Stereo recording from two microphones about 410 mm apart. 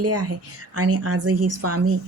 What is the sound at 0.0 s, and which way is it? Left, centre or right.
A woman's voice, right.